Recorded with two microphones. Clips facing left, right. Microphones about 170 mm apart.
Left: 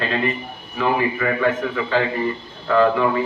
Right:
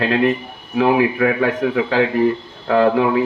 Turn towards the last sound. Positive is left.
turn(degrees=-65)  # may be behind; listen again after turning